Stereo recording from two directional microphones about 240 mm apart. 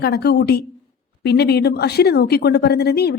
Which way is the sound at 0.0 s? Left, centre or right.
Left.